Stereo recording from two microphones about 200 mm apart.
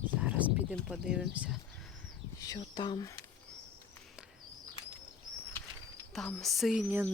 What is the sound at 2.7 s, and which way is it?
Speech, 20° left (ahead or behind).